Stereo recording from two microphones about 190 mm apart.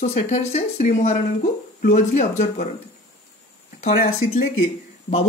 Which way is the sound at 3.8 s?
35° left (ahead or behind).